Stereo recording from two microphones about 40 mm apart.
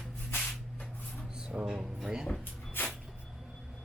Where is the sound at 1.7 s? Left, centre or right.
Centre.